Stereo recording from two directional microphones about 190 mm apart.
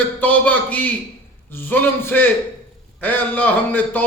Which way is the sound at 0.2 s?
10° left (ahead or behind).